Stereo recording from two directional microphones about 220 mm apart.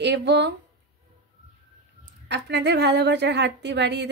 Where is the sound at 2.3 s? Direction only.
50° right (ahead or behind).